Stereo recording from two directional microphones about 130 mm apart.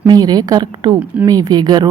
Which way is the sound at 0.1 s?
30° right (ahead or behind).